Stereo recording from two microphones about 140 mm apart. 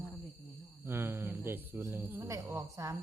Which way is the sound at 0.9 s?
15° right (ahead or behind).